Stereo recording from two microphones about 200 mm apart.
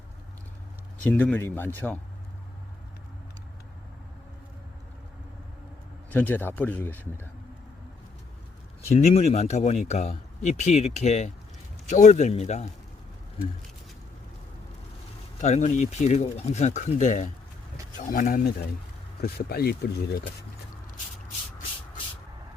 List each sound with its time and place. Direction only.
1.0 s speech: 10° left (ahead or behind)
6.1 s a man's voice: 10° left (ahead or behind)
8.9 s speech: 30° left (ahead or behind)
15.4 s speech: 35° left (ahead or behind); by 20.2 s 50° left (ahead or behind)